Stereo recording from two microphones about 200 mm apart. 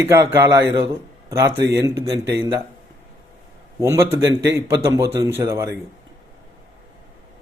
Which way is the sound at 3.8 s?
15° right (ahead or behind).